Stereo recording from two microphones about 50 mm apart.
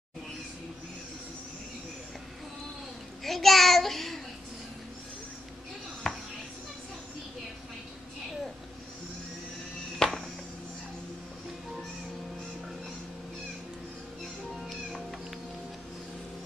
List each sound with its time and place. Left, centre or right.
3.3 s a child's voice: centre
6.0 s a sound: centre
9.9 s music: centre
14.7 s music: centre